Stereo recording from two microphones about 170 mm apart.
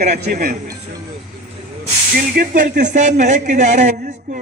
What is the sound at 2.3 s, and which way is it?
Speech, 50° right (ahead or behind).